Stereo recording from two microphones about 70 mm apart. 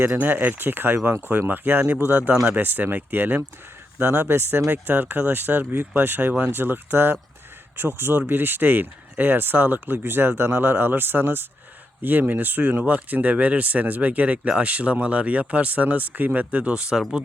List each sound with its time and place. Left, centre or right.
0.0 s speech: right; by 17.0 s centre